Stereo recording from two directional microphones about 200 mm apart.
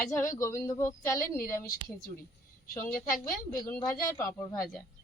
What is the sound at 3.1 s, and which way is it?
Speech, 45° left (ahead or behind).